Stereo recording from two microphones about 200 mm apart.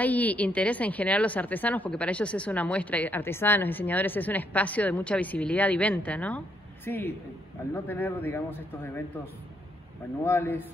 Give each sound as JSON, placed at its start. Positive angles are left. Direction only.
{"t": 0.0, "sound": "a woman's voice", "side_deg": 10}